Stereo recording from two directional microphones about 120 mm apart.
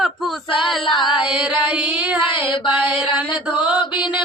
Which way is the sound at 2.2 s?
45° left (ahead or behind).